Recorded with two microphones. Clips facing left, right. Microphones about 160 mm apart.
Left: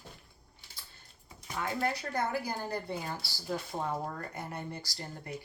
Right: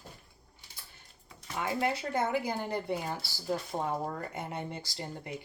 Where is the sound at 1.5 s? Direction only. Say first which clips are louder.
Right 2 dB; 20° right (ahead or behind).